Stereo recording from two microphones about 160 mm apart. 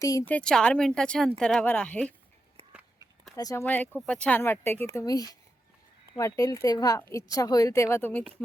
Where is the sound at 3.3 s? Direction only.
20° left (ahead or behind).